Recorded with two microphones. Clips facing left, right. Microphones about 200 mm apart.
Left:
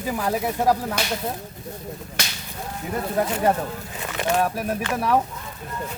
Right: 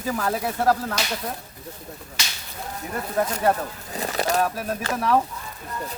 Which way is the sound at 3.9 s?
35° right (ahead or behind).